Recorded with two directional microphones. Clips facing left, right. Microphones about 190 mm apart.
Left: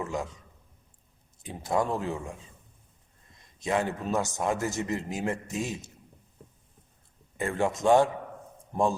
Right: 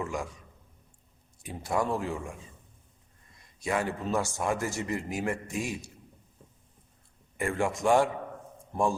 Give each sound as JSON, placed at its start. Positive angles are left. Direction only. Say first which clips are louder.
{"t": 0.0, "sound": "a man's voice", "louder": "left 1 dB", "side_deg": 20}
{"t": 1.4, "sound": "a man's voice", "louder": "left 2 dB", "side_deg": 20}
{"t": 3.6, "sound": "a man's voice", "louder": "left 2 dB", "side_deg": 20}
{"t": 7.3, "sound": "a man's voice", "louder": "left 1 dB", "side_deg": 20}